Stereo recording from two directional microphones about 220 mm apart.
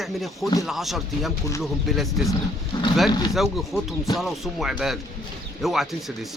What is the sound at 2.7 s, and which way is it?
Speech, 20° left (ahead or behind).